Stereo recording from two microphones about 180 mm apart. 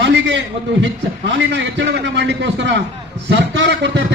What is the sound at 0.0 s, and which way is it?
Speech, 85° right.